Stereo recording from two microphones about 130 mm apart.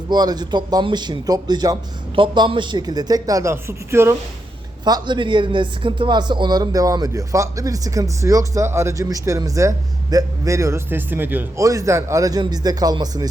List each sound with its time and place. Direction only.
0.1 s a man's voice: 30° right (ahead or behind)
4.9 s speech: 35° right (ahead or behind)